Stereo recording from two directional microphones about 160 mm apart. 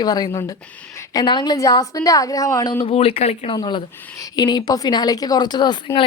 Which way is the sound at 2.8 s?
35° left (ahead or behind).